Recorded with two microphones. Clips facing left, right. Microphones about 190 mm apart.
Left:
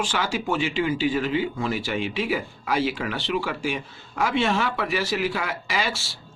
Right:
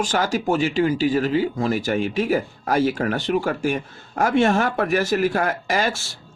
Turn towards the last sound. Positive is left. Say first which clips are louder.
# right 5 dB
turn(degrees=-45)  # may be behind; listen again after turning